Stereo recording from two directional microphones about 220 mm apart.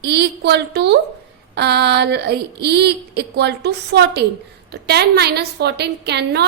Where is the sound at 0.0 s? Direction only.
50° right (ahead or behind).